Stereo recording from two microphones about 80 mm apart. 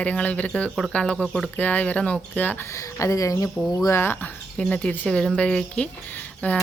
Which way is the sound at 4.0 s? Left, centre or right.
Left.